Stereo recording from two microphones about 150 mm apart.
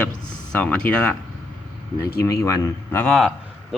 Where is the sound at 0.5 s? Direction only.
10° left (ahead or behind).